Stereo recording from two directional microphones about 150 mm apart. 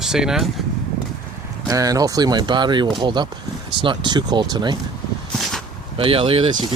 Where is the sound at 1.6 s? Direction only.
25° right (ahead or behind).